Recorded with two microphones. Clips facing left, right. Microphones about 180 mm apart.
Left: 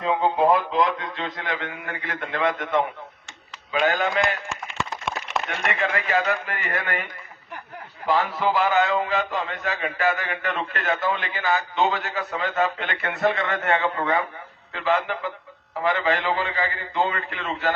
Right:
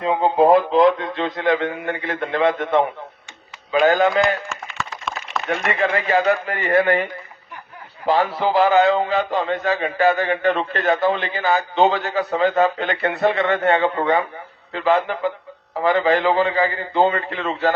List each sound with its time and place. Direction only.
0.0 s a man's voice: 35° right (ahead or behind)
5.5 s a man's voice: 35° right (ahead or behind)